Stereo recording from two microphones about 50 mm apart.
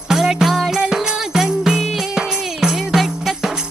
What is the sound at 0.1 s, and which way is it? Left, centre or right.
Music, centre.